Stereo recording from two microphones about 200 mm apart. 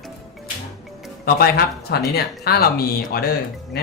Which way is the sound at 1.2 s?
50° left (ahead or behind).